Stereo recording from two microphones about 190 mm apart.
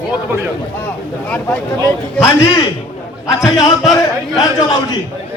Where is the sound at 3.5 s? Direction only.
20° left (ahead or behind).